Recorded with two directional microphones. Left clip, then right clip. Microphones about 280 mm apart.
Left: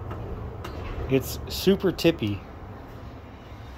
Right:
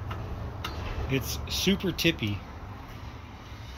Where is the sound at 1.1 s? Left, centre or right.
Centre.